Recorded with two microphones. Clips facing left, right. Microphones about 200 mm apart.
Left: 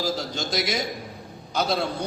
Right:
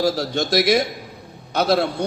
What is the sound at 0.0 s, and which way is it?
A man's voice, 70° right (ahead or behind).